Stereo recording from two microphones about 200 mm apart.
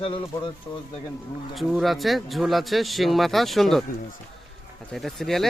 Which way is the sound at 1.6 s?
Centre (ahead or behind).